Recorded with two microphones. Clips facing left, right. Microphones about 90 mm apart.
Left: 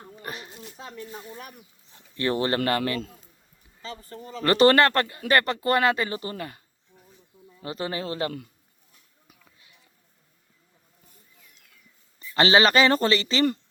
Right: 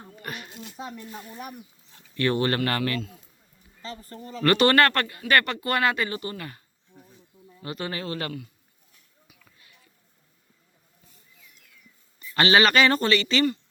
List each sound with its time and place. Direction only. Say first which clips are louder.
0.2 s a sound: even; 30° left (ahead or behind)
1.9 s a sound: right 1 dB; 25° left (ahead or behind)
2.6 s speech: left 2 dB; 25° left (ahead or behind)
3.8 s speech: even; 5° left (ahead or behind)
4.4 s speech: left 1 dB; 30° left (ahead or behind)
6.9 s insect: right 4 dB; 15° right (ahead or behind)
7.6 s speech: left 2 dB; 25° left (ahead or behind)
9.4 s a sound: even; 20° left (ahead or behind)
12.4 s speech: left 1 dB; 30° left (ahead or behind)